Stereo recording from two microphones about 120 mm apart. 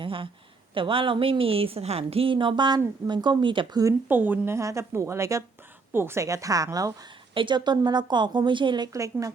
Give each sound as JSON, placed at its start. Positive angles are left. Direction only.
{"t": 0.0, "sound": "a sound", "side_deg": -45}
{"t": 0.7, "sound": "a woman's voice", "side_deg": -45}
{"t": 4.1, "sound": "a woman's voice", "side_deg": -15}
{"t": 7.3, "sound": "a woman's voice", "side_deg": -40}